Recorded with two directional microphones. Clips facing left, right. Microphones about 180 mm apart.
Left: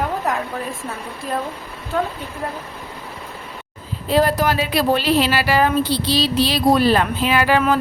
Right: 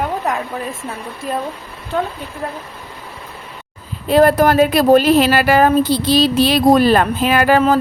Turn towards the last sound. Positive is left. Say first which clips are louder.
# right 4 dB
turn(degrees=-45)  # may be behind; listen again after turning